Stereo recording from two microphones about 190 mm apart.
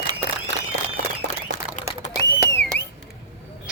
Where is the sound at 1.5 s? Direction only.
40° left (ahead or behind).